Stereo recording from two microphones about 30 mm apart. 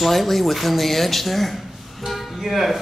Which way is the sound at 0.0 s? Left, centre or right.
Centre.